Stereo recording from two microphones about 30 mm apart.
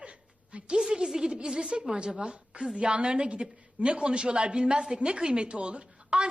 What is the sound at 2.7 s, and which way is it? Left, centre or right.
A woman's voice, right.